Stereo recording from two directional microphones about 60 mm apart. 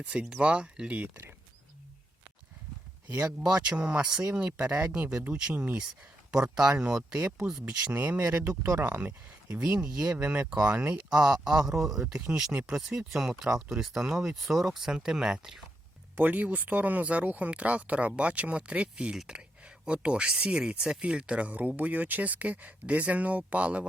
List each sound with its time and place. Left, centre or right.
0.0 s speech: centre
3.4 s speech: centre
6.3 s speech: centre
7.9 s speech: right
9.6 s speech: right
16.1 s speech: right